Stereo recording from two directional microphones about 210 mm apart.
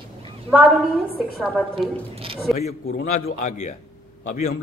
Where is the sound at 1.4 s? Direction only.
Centre (ahead or behind).